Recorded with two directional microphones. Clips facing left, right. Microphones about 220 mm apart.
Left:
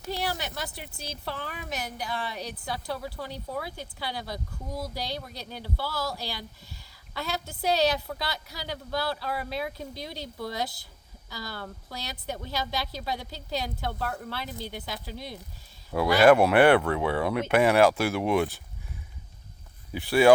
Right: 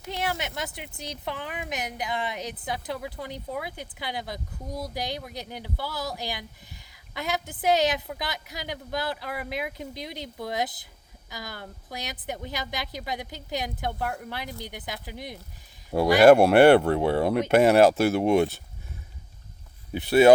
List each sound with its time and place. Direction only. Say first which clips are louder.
0.1 s a woman's voice: right 1 dB; 20° right (ahead or behind)
16.3 s speech: right 4 dB; 40° right (ahead or behind)
18.2 s a woman's voice: right 4 dB; 25° right (ahead or behind)
20.0 s a woman's voice: right 3 dB; 20° right (ahead or behind)